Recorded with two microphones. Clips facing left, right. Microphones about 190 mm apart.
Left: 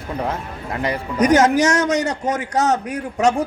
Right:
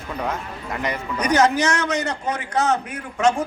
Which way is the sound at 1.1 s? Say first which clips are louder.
Left 4 dB; 45° left (ahead or behind).